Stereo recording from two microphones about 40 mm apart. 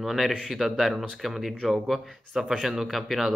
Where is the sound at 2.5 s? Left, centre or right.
Centre.